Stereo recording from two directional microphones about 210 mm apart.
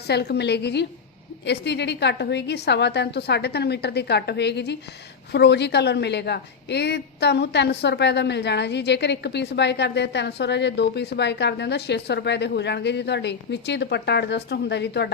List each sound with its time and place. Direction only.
0.1 s a woman's voice: 50° left (ahead or behind)